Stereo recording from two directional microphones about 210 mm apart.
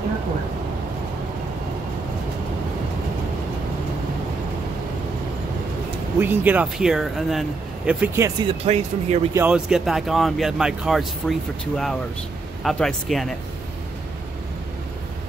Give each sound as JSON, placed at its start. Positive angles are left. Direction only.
{"t": 6.1, "sound": "speech", "side_deg": -10}
{"t": 8.5, "sound": "speech", "side_deg": -30}
{"t": 9.3, "sound": "speech", "side_deg": -5}